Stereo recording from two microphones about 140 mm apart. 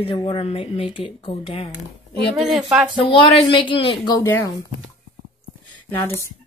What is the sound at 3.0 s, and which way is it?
Speech, 35° left (ahead or behind).